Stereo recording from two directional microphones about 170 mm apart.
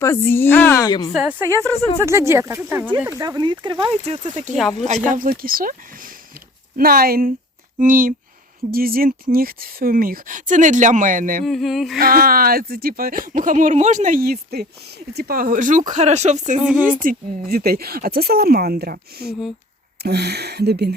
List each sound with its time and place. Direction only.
0.0 s a woman's voice: 15° left (ahead or behind)
1.1 s speech: 5° right (ahead or behind)
3.1 s speech: 20° right (ahead or behind)
4.0 s speech: 40° right (ahead or behind)
5.0 s speech: 55° right (ahead or behind)
11.4 s a sound: centre (ahead or behind)
11.9 s speech: 60° right (ahead or behind); by 16.6 s 45° right (ahead or behind)
16.6 s speech: 5° right (ahead or behind)
17.5 s speech: 65° right (ahead or behind)